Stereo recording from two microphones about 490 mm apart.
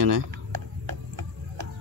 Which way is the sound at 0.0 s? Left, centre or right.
Right.